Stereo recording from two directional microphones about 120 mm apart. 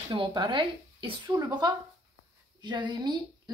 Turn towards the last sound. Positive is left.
turn(degrees=-40)  # may be behind; listen again after turning